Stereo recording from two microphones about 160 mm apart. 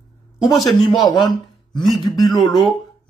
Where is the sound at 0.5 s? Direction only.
Centre (ahead or behind).